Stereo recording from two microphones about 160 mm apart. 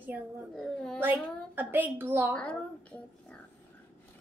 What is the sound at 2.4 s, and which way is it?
Speech, 5° left (ahead or behind).